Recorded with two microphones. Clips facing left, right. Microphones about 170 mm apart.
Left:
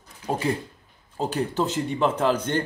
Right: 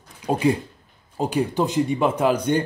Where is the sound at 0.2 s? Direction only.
15° right (ahead or behind).